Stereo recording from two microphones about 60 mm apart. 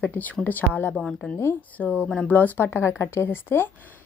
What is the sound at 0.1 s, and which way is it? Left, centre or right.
A woman's voice, left.